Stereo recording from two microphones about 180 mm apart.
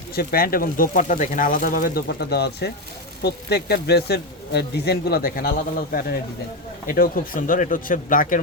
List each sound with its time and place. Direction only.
0.2 s speech: 55° left (ahead or behind)